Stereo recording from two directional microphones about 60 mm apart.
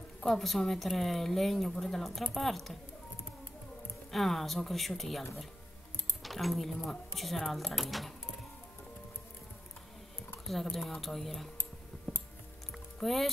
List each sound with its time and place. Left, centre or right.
0.2 s a woman's voice: centre
4.1 s a woman's voice: centre
6.2 s a woman's voice: centre
10.4 s a woman's voice: centre
12.1 s a sound: centre
13.0 s a woman's voice: centre